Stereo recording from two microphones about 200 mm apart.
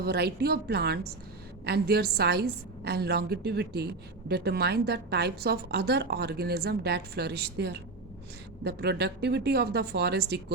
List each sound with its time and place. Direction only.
0.0 s a woman's voice: 55° right (ahead or behind)